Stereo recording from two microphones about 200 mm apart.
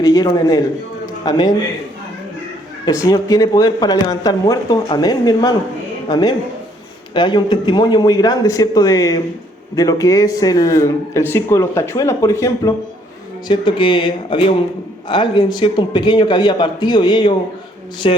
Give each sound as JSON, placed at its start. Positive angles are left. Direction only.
{"t": 0.0, "sound": "speech", "side_deg": 20}
{"t": 2.8, "sound": "speech", "side_deg": 20}